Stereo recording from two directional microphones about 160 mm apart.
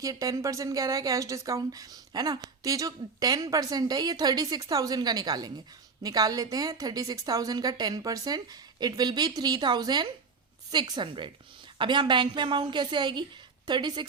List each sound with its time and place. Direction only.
0.0 s a woman's voice: 20° right (ahead or behind)